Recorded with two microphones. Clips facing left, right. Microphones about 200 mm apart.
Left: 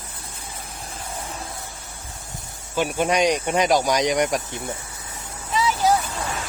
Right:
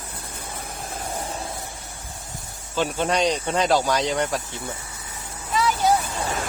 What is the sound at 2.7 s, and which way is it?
Speech, 10° left (ahead or behind).